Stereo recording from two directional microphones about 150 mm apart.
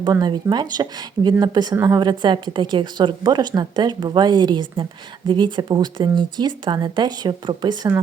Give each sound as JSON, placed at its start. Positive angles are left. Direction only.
{"t": 0.0, "sound": "a woman's voice", "side_deg": -30}